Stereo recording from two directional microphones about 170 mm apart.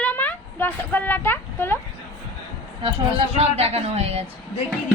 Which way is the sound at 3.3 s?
35° right (ahead or behind).